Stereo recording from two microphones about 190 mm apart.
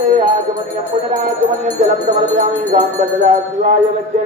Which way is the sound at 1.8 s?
40° right (ahead or behind).